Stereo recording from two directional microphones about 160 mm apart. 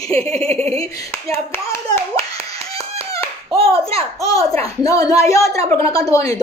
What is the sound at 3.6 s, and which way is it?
A woman's voice, 20° left (ahead or behind).